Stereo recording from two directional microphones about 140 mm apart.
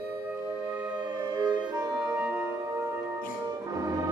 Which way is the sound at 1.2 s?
30° right (ahead or behind).